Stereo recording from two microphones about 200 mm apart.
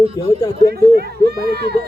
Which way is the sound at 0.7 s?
50° right (ahead or behind).